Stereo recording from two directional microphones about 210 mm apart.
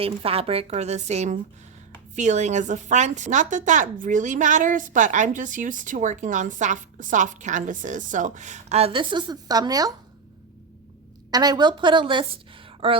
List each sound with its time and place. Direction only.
0.0 s a woman's voice: 25° right (ahead or behind)
11.3 s a woman's voice: 20° right (ahead or behind)